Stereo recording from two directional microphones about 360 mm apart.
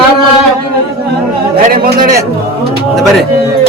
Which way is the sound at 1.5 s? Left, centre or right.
Right.